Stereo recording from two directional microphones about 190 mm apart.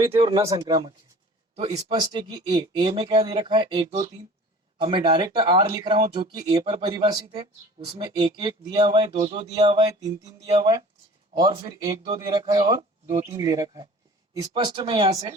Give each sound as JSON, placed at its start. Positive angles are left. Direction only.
{"t": 0.1, "sound": "speech", "side_deg": -25}
{"t": 11.3, "sound": "speech", "side_deg": -25}